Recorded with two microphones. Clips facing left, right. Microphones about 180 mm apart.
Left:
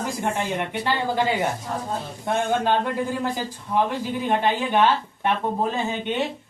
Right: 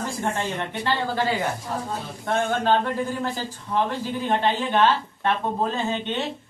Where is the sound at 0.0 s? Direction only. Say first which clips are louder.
Left 1 dB; 15° left (ahead or behind).